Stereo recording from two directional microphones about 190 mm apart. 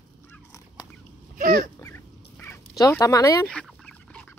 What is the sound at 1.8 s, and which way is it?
Duck, 10° left (ahead or behind).